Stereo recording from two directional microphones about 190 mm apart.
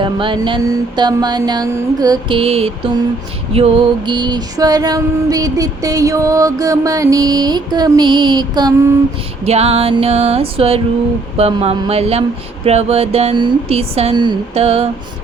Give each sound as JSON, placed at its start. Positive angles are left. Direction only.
{"t": 0.0, "sound": "female singing", "side_deg": -25}
{"t": 9.4, "sound": "speech", "side_deg": -35}